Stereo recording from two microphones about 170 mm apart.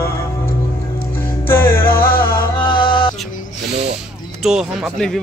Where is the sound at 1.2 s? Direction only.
15° left (ahead or behind).